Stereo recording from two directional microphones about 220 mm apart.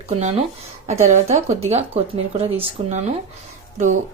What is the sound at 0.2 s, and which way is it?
A woman's voice, 30° right (ahead or behind).